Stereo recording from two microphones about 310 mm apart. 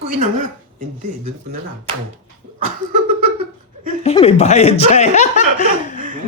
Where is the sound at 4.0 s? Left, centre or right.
Centre.